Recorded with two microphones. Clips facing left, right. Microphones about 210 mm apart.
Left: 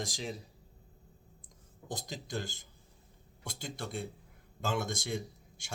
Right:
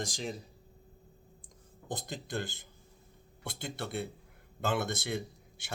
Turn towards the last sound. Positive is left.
turn(degrees=-60)  # may be behind; listen again after turning